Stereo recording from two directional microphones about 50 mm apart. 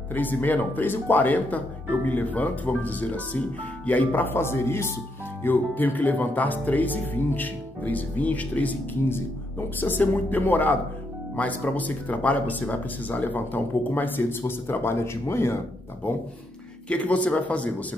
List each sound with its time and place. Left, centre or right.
0.1 s speech: left
5.4 s speech: left
9.8 s speech: left
16.9 s a man's voice: left